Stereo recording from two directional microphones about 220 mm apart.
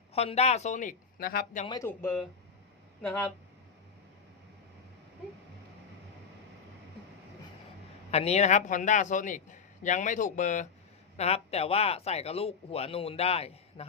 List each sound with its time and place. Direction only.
0.1 s a man's voice: 30° left (ahead or behind); by 1.6 s 45° left (ahead or behind)
1.6 s speech: 20° left (ahead or behind)
1.9 s speech: 10° left (ahead or behind)
8.1 s a man's voice: 30° left (ahead or behind)